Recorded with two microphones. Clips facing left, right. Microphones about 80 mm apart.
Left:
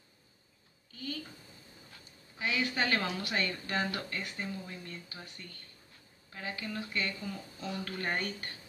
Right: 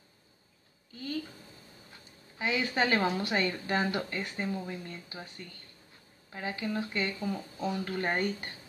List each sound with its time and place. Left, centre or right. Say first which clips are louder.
2.3 s speech: right 3 dB; right
6.3 s speech: right 5 dB; right